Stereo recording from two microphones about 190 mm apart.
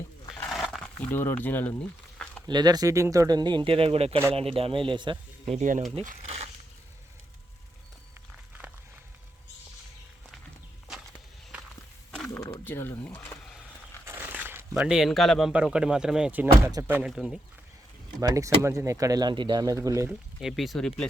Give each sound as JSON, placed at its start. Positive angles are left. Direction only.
{"t": 0.5, "sound": "speech", "side_deg": 0}
{"t": 2.5, "sound": "speech", "side_deg": -20}
{"t": 5.5, "sound": "speech", "side_deg": -40}
{"t": 6.1, "sound": "crumpling", "side_deg": -35}
{"t": 12.1, "sound": "a sound", "side_deg": 5}
{"t": 14.0, "sound": "speech", "side_deg": -10}
{"t": 18.2, "sound": "speech", "side_deg": -15}
{"t": 20.1, "sound": "speech", "side_deg": 0}